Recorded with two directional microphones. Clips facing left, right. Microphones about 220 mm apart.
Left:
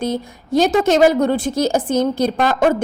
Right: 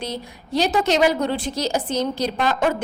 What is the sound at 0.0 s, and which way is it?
A woman's voice, 50° left (ahead or behind).